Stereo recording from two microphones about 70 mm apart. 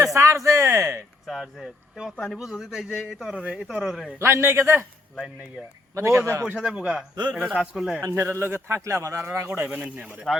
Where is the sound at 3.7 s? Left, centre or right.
Centre.